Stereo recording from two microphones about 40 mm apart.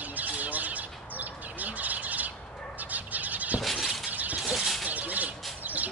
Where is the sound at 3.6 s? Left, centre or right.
Centre.